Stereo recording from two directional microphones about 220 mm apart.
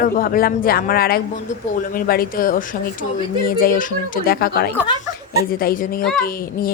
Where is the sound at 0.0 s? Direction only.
40° left (ahead or behind).